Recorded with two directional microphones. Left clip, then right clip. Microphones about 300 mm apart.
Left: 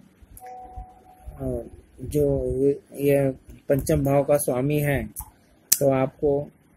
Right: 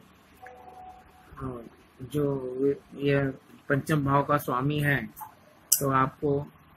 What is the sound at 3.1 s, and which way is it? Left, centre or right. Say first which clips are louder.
Speech: left 6 dB; centre.